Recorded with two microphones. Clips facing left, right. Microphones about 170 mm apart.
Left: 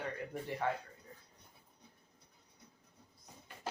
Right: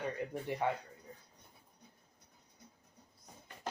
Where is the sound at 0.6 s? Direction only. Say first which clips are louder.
Right 1 dB; 15° right (ahead or behind).